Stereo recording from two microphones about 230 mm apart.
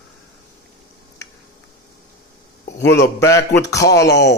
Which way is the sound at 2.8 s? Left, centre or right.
Left.